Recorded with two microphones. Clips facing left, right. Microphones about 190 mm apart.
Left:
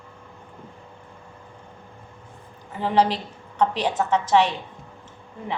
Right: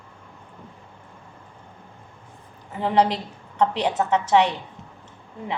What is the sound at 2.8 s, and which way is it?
A woman's voice, 15° right (ahead or behind).